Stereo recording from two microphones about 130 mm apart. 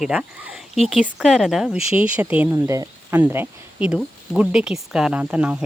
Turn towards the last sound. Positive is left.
turn(degrees=-10)  # may be behind; listen again after turning